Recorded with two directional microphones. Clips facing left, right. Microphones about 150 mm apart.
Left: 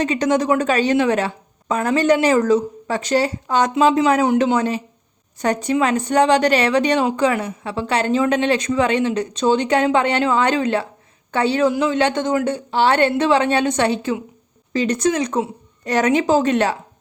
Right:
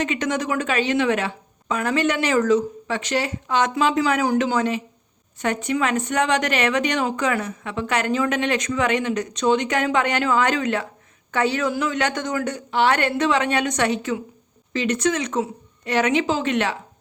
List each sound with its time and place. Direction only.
0.0 s a woman's voice: 35° left (ahead or behind)